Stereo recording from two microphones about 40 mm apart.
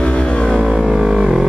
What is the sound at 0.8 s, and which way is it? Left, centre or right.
Music, centre.